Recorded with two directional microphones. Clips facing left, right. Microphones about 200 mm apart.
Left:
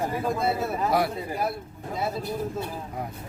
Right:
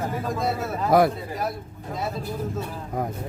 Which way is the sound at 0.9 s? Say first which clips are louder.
Right 8 dB; 50° right (ahead or behind).